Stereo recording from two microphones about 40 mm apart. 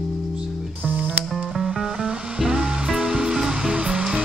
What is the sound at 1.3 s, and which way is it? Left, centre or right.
Music, centre.